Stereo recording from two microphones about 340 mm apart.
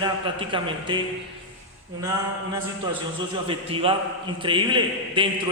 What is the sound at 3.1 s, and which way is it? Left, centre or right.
A man's voice, centre.